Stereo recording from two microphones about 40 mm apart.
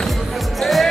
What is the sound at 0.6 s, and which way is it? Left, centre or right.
Music, centre.